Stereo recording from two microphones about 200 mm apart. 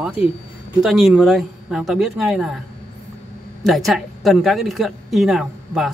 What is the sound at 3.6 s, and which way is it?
Speech, centre (ahead or behind).